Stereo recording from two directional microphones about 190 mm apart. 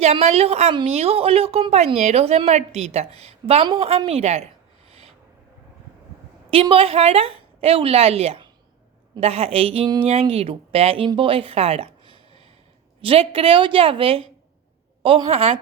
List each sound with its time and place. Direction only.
0.0 s a woman's voice: 35° right (ahead or behind)
6.5 s a woman's voice: 30° right (ahead or behind)